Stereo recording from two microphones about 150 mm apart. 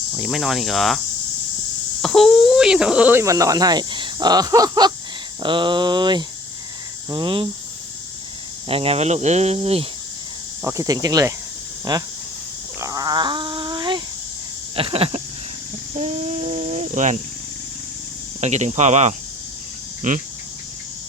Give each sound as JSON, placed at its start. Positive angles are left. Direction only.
{"t": 0.2, "sound": "speech", "side_deg": 0}
{"t": 5.4, "sound": "a sound", "side_deg": -30}
{"t": 8.6, "sound": "speech", "side_deg": -40}
{"t": 10.6, "sound": "speech", "side_deg": -20}
{"t": 12.8, "sound": "a sound", "side_deg": -25}
{"t": 18.3, "sound": "speech", "side_deg": -50}